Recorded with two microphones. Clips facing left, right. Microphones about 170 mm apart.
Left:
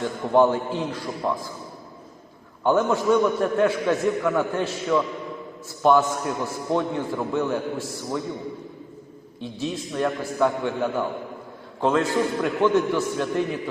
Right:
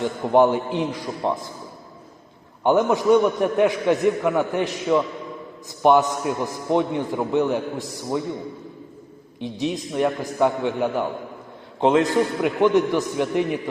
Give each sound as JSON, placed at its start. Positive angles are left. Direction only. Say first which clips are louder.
{"t": 0.0, "sound": "a man's voice", "louder": "right 2 dB", "side_deg": -20}
{"t": 2.6, "sound": "a man's voice", "louder": "right 3 dB", "side_deg": -15}
{"t": 9.4, "sound": "a man's voice", "louder": "right 4 dB", "side_deg": -15}